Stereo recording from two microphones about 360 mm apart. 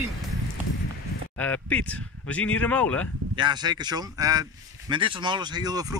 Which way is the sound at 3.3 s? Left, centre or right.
Centre.